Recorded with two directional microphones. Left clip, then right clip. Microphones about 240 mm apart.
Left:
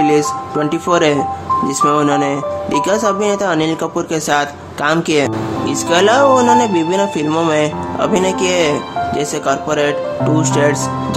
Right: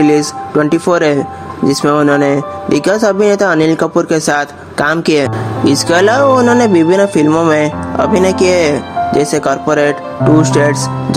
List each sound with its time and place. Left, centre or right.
0.0 s speech: right